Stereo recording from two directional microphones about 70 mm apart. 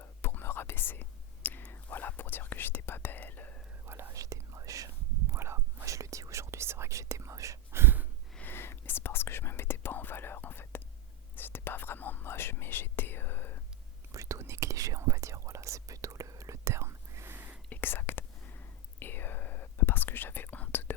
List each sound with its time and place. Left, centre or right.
0.0 s whispering: left
4.1 s whispering: right
5.3 s whispering: right
8.4 s whispering: left
14.1 s whispering: right
17.7 s whispering: left